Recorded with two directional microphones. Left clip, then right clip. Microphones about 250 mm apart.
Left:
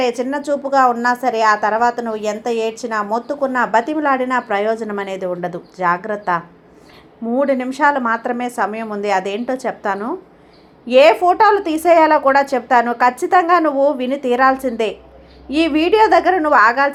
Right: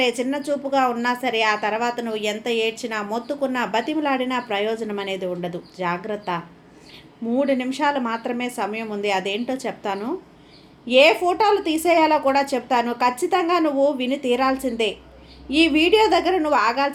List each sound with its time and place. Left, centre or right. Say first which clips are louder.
0.0 s a woman's voice: left 3 dB; centre